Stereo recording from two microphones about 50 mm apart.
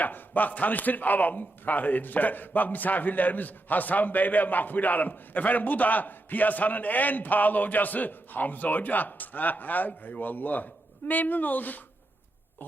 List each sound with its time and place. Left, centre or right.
0.0 s speech: left